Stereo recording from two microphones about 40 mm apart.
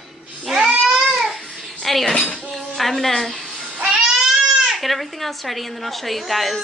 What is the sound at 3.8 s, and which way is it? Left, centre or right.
Music, centre.